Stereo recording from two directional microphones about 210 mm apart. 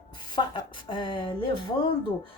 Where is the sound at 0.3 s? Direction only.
20° left (ahead or behind).